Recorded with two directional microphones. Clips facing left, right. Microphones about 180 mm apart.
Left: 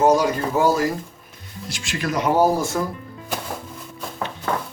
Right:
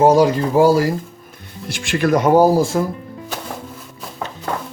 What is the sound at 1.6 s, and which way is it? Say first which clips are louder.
Speech: right 8 dB; 60° right (ahead or behind).